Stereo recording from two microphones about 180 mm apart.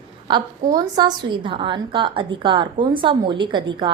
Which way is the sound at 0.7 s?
20° right (ahead or behind).